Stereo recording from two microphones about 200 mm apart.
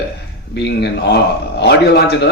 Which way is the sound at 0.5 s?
60° left (ahead or behind).